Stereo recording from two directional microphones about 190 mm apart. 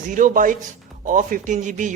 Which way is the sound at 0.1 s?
45° right (ahead or behind).